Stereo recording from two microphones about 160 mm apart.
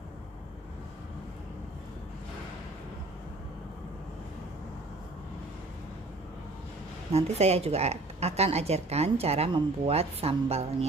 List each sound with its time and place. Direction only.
7.1 s a woman's voice: 40° right (ahead or behind)